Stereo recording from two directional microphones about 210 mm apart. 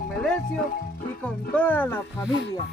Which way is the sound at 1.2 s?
5° left (ahead or behind).